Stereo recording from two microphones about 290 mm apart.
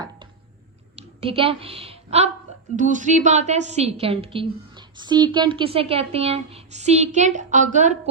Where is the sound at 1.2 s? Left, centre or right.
Centre.